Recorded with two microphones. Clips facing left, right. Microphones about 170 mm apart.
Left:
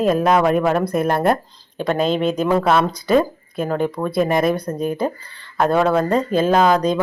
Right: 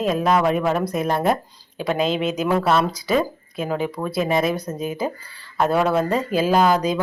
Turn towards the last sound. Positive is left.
turn(degrees=-5)  # may be behind; listen again after turning